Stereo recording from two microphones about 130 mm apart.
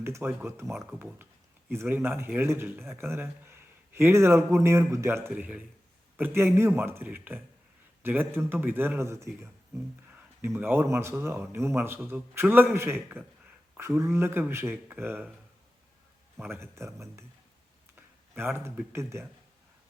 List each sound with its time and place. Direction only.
0.0 s speech: 15° right (ahead or behind)
16.4 s speech: 20° right (ahead or behind)